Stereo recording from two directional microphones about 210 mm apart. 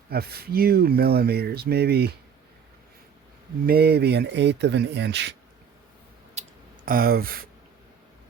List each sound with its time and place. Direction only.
0.1 s speech: 50° right (ahead or behind)
3.7 s speech: 50° right (ahead or behind)
6.4 s clicking: 30° right (ahead or behind)
6.8 s speech: 45° right (ahead or behind)